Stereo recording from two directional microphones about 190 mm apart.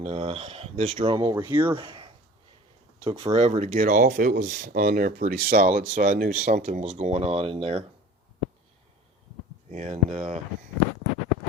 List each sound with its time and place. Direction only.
0.0 s speech: 30° right (ahead or behind)
1.0 s speech: 25° right (ahead or behind)
1.7 s speech: 25° right (ahead or behind); by 4.5 s 45° right (ahead or behind)
4.5 s speech: 55° right (ahead or behind); by 7.9 s 30° right (ahead or behind)
9.7 s speech: 35° right (ahead or behind)